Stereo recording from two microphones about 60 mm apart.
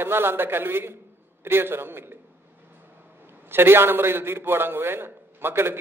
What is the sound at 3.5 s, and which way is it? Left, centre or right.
A man's voice, right.